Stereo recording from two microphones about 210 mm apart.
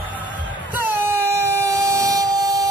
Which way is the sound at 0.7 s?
10° right (ahead or behind).